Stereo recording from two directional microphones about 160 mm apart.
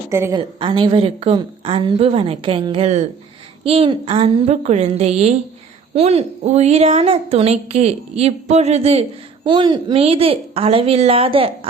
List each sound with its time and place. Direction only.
0.1 s a woman's voice: 15° right (ahead or behind)
0.3 s a woman's voice: 30° right (ahead or behind)
9.4 s a woman's voice: 30° right (ahead or behind)